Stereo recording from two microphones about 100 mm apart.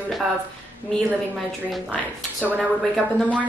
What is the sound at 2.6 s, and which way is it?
Speech, 5° left (ahead or behind).